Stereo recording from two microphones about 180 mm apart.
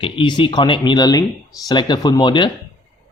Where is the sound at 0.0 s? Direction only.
25° left (ahead or behind).